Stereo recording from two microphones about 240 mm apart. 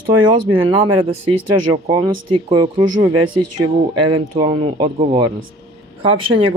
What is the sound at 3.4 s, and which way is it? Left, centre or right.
Speech, right.